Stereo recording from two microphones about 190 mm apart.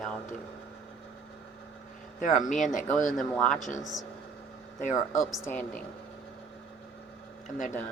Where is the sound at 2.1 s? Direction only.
45° left (ahead or behind).